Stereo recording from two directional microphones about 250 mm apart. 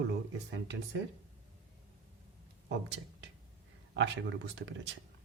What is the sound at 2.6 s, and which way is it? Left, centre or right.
Speech, right.